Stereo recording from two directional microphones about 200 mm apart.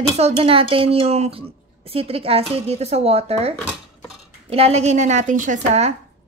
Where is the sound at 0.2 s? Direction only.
30° right (ahead or behind).